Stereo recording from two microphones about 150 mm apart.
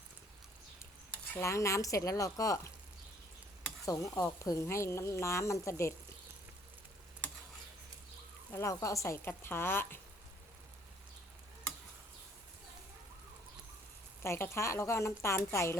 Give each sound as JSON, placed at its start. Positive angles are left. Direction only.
{"t": 1.1, "sound": "speech", "side_deg": 15}
{"t": 3.8, "sound": "speech", "side_deg": 20}
{"t": 8.5, "sound": "a woman's voice", "side_deg": 20}
{"t": 14.2, "sound": "a woman's voice", "side_deg": 15}